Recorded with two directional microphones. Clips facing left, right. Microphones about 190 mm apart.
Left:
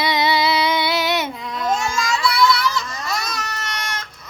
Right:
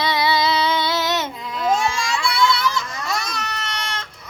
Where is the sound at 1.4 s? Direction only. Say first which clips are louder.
Left 1 dB; centre (ahead or behind).